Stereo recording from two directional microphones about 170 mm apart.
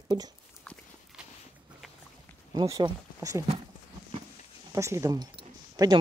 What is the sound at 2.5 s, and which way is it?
Speech, 20° right (ahead or behind).